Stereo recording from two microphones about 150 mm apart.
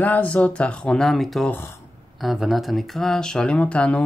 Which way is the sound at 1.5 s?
15° left (ahead or behind).